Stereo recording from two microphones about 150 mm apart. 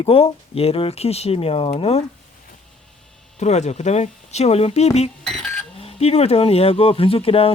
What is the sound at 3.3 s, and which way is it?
Speech, 50° left (ahead or behind).